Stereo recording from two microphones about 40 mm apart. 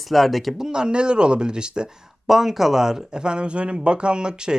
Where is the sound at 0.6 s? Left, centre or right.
Right.